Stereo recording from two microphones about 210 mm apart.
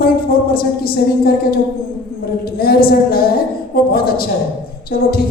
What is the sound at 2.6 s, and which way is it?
A woman's voice, 45° left (ahead or behind).